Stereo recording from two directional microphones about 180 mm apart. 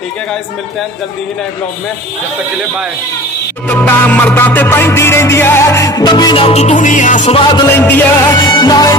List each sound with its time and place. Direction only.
3.6 s music: 10° left (ahead or behind); by 7.3 s 45° left (ahead or behind)
7.6 s music: 10° left (ahead or behind)
8.5 s music: 25° left (ahead or behind)